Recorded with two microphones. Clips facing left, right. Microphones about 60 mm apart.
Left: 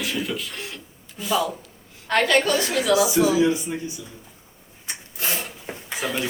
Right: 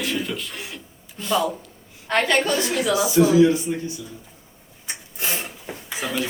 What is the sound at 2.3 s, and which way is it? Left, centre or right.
Speech, right.